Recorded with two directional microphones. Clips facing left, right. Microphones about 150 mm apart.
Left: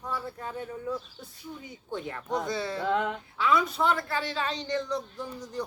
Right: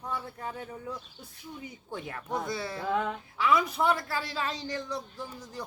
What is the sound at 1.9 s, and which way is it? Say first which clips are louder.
Speech: left 3 dB; 10° right (ahead or behind).